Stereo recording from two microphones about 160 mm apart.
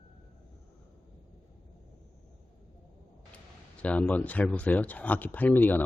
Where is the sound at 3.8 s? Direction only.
10° left (ahead or behind).